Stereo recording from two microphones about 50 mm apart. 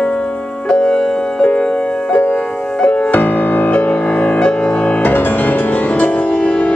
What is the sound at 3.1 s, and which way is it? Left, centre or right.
Music, left.